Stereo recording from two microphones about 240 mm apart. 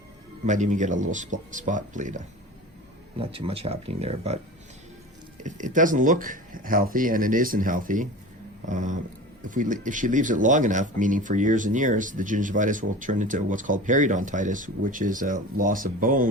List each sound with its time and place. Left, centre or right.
0.4 s speech: right
5.4 s speech: right